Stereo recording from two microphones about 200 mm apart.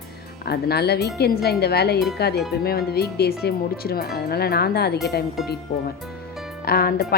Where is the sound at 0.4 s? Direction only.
50° left (ahead or behind).